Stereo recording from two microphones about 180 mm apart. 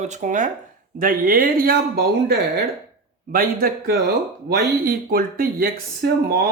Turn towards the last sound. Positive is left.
turn(degrees=-55)  # may be behind; listen again after turning